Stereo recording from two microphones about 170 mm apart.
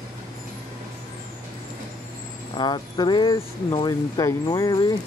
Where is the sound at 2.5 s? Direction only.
25° left (ahead or behind).